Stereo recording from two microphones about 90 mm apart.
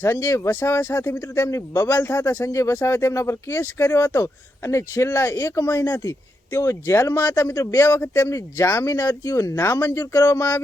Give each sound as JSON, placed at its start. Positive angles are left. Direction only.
{"t": 0.0, "sound": "speech", "side_deg": 30}
{"t": 9.6, "sound": "speech", "side_deg": 25}